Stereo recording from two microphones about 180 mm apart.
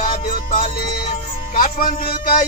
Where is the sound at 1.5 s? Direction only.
50° left (ahead or behind).